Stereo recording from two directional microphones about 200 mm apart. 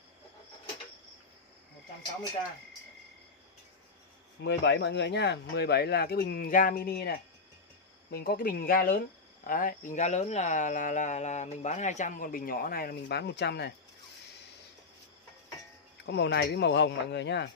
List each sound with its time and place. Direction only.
4.4 s speech: 60° left (ahead or behind)
16.1 s speech: 55° left (ahead or behind)